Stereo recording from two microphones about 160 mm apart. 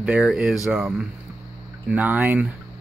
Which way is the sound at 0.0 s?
5° right (ahead or behind).